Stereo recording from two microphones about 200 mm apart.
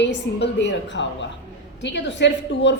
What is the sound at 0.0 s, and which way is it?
A woman's voice, 60° left (ahead or behind).